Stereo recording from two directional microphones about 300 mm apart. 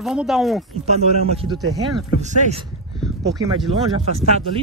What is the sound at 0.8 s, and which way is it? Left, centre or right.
Speech, right.